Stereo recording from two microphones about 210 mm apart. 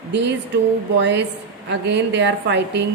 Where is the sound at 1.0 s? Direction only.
55° right (ahead or behind).